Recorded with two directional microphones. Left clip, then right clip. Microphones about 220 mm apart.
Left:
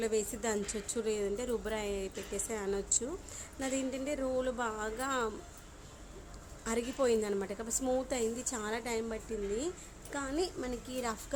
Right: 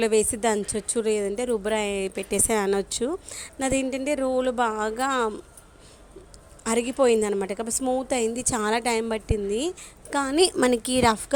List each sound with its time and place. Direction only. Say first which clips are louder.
0.0 s a woman's voice: right 12 dB; 35° right (ahead or behind)
6.7 s a woman's voice: right 10 dB; 30° right (ahead or behind)